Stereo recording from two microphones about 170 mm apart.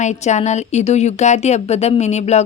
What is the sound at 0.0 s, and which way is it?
Speech, 45° left (ahead or behind).